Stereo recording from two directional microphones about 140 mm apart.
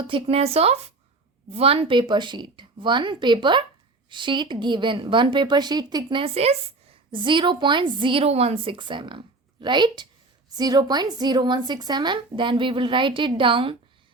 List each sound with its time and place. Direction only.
0.0 s a woman's voice: 40° right (ahead or behind)
7.1 s a woman's voice: 35° right (ahead or behind)